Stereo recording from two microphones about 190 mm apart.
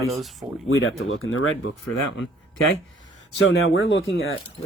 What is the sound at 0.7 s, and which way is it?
Speech, 90° left.